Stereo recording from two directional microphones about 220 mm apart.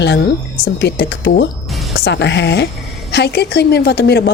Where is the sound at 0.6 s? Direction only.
50° left (ahead or behind).